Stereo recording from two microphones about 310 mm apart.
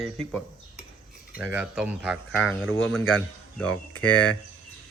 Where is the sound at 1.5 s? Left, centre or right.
Centre.